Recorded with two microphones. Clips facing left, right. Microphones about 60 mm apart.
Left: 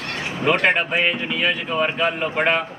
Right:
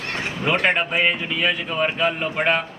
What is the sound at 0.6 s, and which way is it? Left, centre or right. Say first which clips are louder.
A man's voice: left 1 dB; centre.